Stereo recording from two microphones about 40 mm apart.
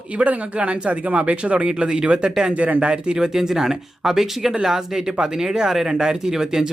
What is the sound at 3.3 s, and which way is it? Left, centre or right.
Speech, centre.